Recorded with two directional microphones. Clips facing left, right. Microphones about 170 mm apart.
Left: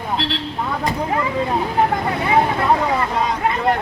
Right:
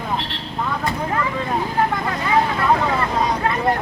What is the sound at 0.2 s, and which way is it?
Vehicle, 90° left.